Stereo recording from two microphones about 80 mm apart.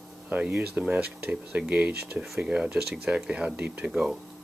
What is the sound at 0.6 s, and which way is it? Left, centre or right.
Speech, centre.